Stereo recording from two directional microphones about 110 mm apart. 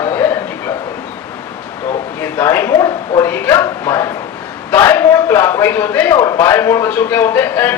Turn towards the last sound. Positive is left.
turn(degrees=15)  # may be behind; listen again after turning